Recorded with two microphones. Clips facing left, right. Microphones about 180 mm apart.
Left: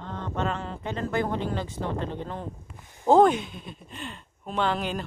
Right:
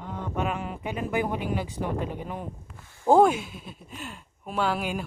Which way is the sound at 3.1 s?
5° right (ahead or behind).